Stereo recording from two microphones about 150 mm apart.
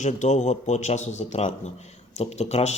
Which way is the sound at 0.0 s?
50° left (ahead or behind).